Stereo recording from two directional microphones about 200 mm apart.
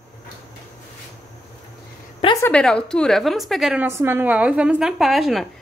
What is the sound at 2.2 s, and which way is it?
Speech, 20° left (ahead or behind).